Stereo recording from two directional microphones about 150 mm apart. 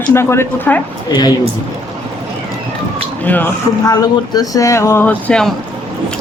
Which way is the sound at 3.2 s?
10° left (ahead or behind).